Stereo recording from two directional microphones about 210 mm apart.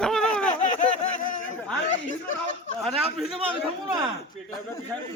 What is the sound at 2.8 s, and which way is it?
Speech, centre (ahead or behind).